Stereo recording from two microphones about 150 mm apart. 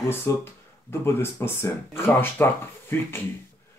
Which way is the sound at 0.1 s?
15° left (ahead or behind).